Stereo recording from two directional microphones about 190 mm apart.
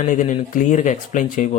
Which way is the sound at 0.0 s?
40° left (ahead or behind).